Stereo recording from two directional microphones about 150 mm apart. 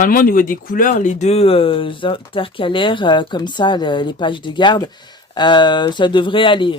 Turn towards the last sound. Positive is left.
turn(degrees=35)  # may be behind; listen again after turning